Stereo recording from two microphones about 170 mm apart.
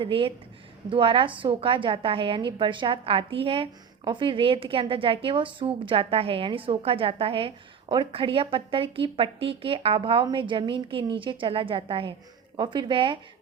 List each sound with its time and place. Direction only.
0.0 s a woman's voice: 30° right (ahead or behind)